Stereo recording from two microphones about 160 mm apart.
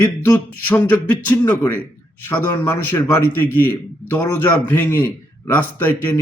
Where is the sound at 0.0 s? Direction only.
10° left (ahead or behind).